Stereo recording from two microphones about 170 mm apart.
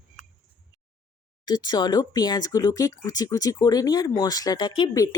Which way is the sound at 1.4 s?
25° left (ahead or behind).